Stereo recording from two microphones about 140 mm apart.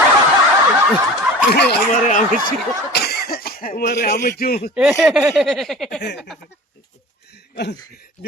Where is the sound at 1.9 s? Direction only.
60° left (ahead or behind).